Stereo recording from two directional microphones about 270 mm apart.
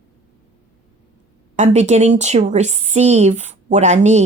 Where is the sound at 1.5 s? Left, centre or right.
Right.